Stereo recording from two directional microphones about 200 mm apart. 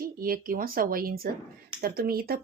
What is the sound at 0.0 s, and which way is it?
Speech, 45° right (ahead or behind).